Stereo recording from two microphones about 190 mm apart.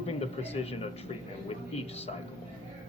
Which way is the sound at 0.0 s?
35° left (ahead or behind).